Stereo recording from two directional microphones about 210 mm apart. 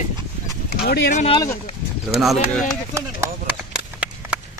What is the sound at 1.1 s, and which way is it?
Speech, 30° left (ahead or behind).